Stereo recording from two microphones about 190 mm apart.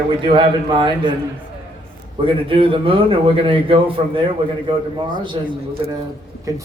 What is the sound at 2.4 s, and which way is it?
A man's voice, 30° right (ahead or behind).